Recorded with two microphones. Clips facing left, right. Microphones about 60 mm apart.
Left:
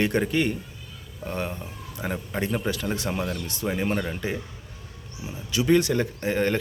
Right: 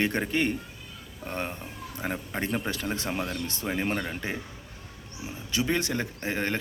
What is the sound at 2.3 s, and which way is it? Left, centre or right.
Speech, right.